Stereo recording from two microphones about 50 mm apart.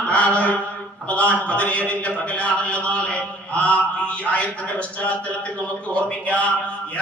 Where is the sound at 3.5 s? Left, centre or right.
Left.